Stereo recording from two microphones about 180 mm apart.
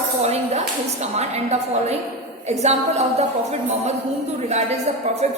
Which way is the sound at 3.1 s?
35° right (ahead or behind).